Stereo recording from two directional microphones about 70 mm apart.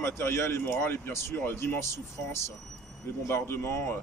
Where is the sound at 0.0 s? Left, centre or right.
Left.